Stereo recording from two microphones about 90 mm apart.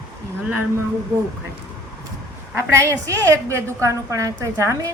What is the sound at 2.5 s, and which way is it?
A woman's voice, 30° right (ahead or behind).